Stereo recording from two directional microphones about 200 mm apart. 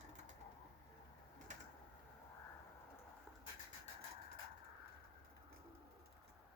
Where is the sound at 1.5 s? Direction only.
40° right (ahead or behind).